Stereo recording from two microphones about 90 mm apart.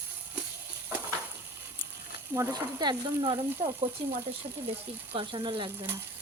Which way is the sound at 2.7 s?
55° right (ahead or behind).